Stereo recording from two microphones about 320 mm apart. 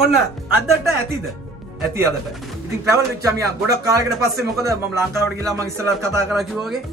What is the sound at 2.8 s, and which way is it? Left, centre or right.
Speech, centre.